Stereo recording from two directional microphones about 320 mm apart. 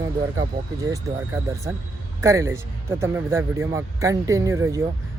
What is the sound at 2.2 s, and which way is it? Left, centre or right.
Speech, centre.